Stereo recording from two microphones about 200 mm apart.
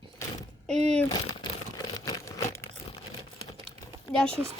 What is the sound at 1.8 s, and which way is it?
Crumpling, 15° left (ahead or behind).